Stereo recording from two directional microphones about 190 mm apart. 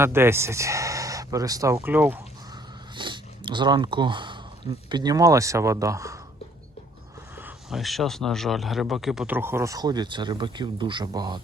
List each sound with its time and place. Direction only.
0.0 s a man's voice: 15° right (ahead or behind)
2.9 s speech: 25° right (ahead or behind)
7.3 s a man's voice: 5° right (ahead or behind)